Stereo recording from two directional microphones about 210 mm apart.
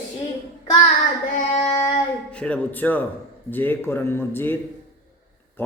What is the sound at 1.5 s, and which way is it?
Child singing, 20° left (ahead or behind).